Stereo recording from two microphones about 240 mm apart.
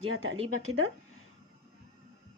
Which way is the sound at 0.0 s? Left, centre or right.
Right.